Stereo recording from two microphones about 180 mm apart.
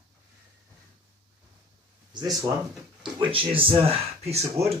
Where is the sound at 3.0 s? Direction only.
30° right (ahead or behind).